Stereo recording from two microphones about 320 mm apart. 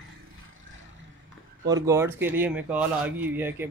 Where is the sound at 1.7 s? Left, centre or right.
Centre.